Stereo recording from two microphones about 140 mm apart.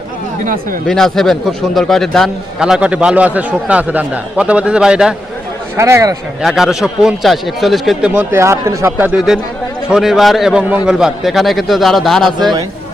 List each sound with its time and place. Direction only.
0.4 s speech: 80° right
0.9 s a man's voice: 5° left (ahead or behind)
5.7 s speech: 20° right (ahead or behind)
6.4 s a man's voice: 5° right (ahead or behind)
8.1 s a man's voice: 15° right (ahead or behind); by 12.5 s centre (ahead or behind)